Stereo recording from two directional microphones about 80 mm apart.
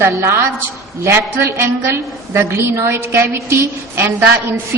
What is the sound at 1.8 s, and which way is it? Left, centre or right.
A woman's voice, right.